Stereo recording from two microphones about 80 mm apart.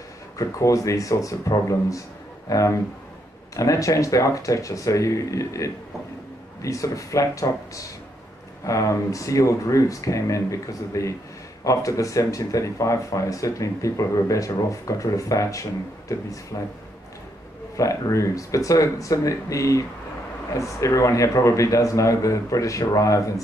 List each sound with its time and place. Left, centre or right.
0.4 s a man's voice: left
17.7 s speech: left